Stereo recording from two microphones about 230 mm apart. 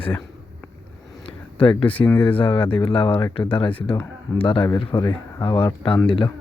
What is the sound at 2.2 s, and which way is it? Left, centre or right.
Speech, left.